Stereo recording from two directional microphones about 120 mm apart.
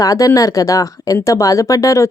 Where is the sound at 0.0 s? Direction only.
30° left (ahead or behind).